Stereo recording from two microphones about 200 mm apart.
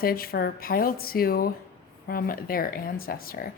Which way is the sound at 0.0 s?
50° left (ahead or behind).